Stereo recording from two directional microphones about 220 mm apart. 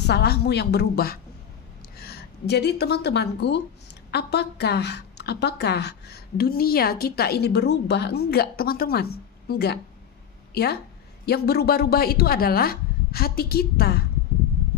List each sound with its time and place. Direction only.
0.0 s a woman's voice: 50° left (ahead or behind)